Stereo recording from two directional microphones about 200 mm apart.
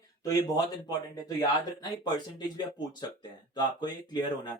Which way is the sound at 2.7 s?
20° left (ahead or behind).